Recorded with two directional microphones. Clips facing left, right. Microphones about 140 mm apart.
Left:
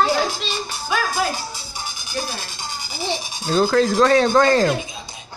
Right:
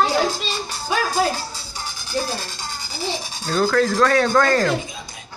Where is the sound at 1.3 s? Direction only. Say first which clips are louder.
Even; 15° left (ahead or behind).